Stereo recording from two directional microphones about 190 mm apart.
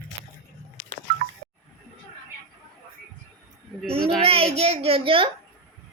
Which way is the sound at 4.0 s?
5° left (ahead or behind).